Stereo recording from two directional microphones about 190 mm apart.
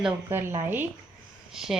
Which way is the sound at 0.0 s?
10° right (ahead or behind).